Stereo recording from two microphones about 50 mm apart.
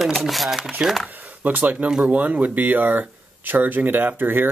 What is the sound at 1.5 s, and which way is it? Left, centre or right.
Speech, right.